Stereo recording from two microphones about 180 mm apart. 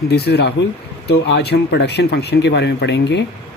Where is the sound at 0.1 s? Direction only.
60° left (ahead or behind).